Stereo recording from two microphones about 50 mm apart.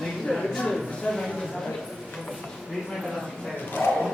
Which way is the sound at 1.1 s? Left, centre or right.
Left.